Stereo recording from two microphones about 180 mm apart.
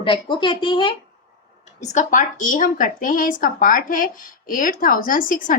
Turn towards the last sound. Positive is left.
turn(degrees=50)  # may be behind; listen again after turning